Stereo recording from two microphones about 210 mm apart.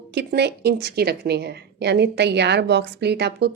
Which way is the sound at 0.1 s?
50° right (ahead or behind).